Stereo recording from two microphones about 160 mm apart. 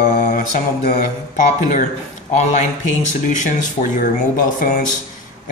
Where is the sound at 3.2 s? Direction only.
50° left (ahead or behind).